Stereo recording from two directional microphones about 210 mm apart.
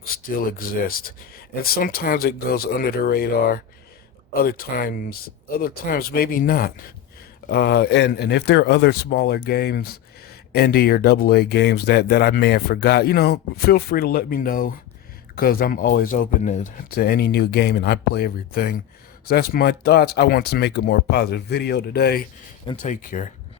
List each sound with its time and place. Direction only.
0.0 s speech: 45° left (ahead or behind)
22.6 s speech: 35° left (ahead or behind)